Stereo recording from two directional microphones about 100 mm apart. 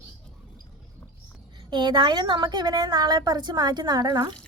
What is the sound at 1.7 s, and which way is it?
A woman's voice, 50° right (ahead or behind).